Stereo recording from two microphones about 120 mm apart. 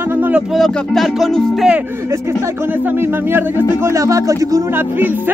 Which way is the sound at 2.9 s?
20° right (ahead or behind).